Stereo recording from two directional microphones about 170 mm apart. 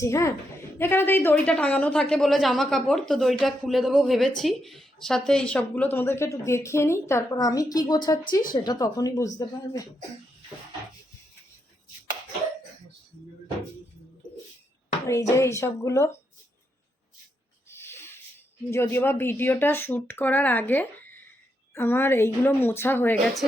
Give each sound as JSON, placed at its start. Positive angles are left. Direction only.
{"t": 0.0, "sound": "speech", "side_deg": 15}
{"t": 8.2, "sound": "speech", "side_deg": 55}
{"t": 8.5, "sound": "speech", "side_deg": 25}
{"t": 15.0, "sound": "speech", "side_deg": 15}
{"t": 17.7, "sound": "a sound", "side_deg": 15}
{"t": 18.7, "sound": "speech", "side_deg": 15}
{"t": 23.2, "sound": "a woman's voice", "side_deg": 0}